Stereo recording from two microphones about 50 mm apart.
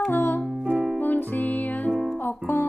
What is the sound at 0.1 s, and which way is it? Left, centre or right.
Music, left.